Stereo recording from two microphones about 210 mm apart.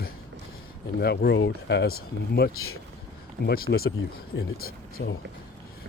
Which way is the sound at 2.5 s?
90° left.